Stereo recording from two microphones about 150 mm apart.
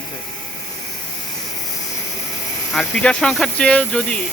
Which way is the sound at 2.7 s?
5° left (ahead or behind).